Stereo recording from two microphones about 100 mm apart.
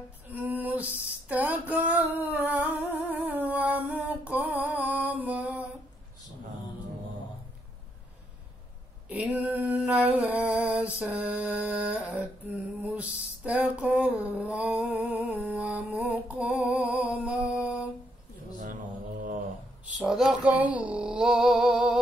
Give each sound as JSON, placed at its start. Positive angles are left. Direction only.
{"t": 0.3, "sound": "music", "side_deg": -15}
{"t": 1.3, "sound": "a sound", "side_deg": -15}
{"t": 9.1, "sound": "a sound", "side_deg": -15}
{"t": 16.6, "sound": "mantra", "side_deg": -10}
{"t": 20.0, "sound": "female singing", "side_deg": -5}
{"t": 20.5, "sound": "female singing", "side_deg": -15}